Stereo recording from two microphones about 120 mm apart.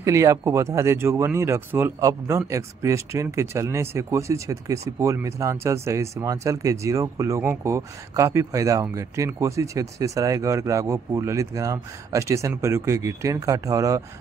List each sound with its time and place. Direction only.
0.0 s speech: 25° right (ahead or behind)